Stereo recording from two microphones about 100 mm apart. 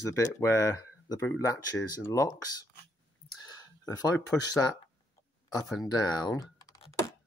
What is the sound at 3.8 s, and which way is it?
Speech, 35° left (ahead or behind).